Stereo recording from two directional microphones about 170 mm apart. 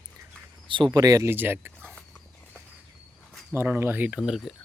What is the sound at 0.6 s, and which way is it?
Speech, 30° right (ahead or behind).